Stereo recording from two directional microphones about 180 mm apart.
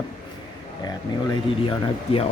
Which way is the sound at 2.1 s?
35° left (ahead or behind).